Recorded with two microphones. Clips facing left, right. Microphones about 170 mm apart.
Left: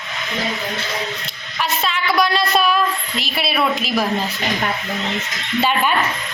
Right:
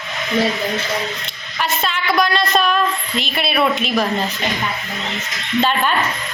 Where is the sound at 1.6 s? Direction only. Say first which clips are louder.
Even; centre (ahead or behind).